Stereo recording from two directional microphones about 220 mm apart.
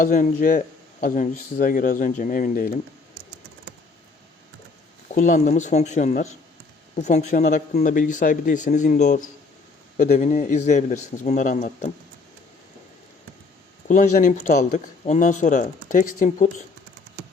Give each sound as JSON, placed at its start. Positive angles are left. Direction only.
{"t": 0.0, "sound": "speech", "side_deg": 35}
{"t": 5.1, "sound": "speech", "side_deg": 35}
{"t": 7.3, "sound": "speech", "side_deg": 35}
{"t": 13.8, "sound": "speech", "side_deg": 35}